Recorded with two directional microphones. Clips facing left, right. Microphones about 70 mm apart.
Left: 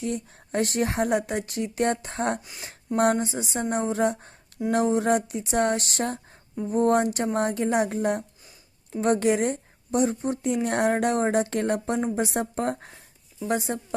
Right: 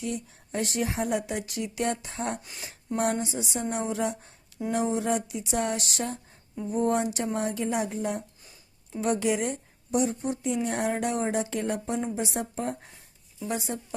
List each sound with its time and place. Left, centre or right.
0.0 s speech: left
2.4 s speech: centre
2.6 s speech: left